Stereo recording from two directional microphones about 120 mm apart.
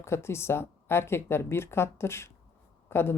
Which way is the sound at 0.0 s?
20° left (ahead or behind).